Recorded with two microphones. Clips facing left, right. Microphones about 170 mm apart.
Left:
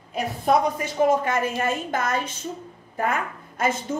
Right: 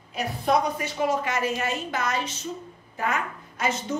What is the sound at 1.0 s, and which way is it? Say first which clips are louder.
A woman's voice: left 6 dB; 50° left (ahead or behind).